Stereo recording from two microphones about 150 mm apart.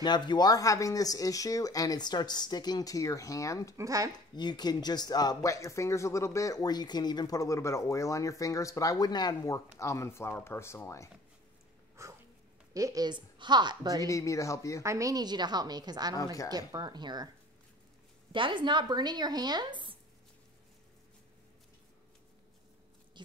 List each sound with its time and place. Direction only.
0.0 s speech: 30° left (ahead or behind)
3.7 s speech: 20° right (ahead or behind)
4.4 s speech: 30° left (ahead or behind)
12.0 s a sound: 20° right (ahead or behind)
12.7 s speech: 25° right (ahead or behind)
14.0 s speech: 20° left (ahead or behind)
14.8 s speech: 20° right (ahead or behind)
18.3 s speech: 35° right (ahead or behind)
23.2 s a sound: 30° right (ahead or behind)